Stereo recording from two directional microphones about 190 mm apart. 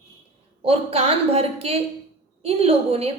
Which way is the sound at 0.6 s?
30° right (ahead or behind).